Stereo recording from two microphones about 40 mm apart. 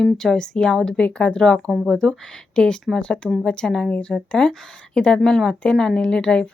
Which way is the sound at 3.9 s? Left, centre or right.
Left.